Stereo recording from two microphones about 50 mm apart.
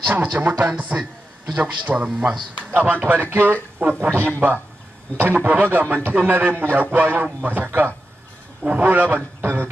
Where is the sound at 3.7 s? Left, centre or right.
Right.